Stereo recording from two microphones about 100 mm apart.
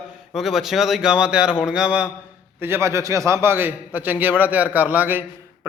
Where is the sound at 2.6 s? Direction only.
25° right (ahead or behind).